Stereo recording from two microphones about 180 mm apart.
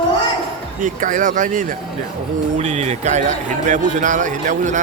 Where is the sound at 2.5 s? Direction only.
40° right (ahead or behind).